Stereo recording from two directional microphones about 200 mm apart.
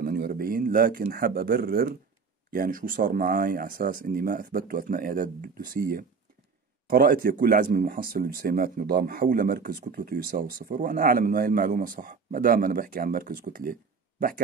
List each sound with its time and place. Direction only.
0.0 s speech: 50° right (ahead or behind)